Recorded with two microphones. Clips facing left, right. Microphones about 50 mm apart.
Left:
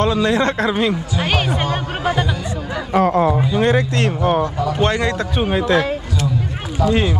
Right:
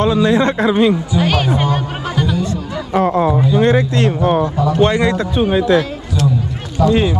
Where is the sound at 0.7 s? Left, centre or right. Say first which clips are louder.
Right 5 dB; right.